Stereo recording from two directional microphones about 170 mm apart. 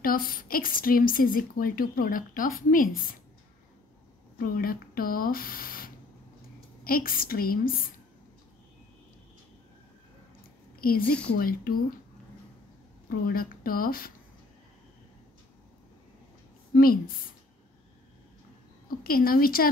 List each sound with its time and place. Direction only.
0.0 s a woman's voice: 55° left (ahead or behind)
4.4 s a woman's voice: 60° left (ahead or behind)
10.8 s a woman's voice: 60° left (ahead or behind)
13.3 s a woman's voice: 60° left (ahead or behind)
16.7 s a woman's voice: 60° left (ahead or behind)
19.0 s a woman's voice: 60° left (ahead or behind)